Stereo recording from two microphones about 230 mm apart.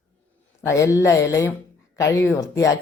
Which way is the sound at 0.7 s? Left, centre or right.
Centre.